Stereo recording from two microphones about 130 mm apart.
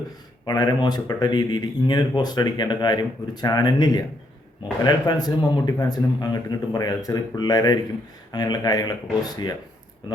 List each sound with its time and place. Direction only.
0.4 s speech: 30° left (ahead or behind)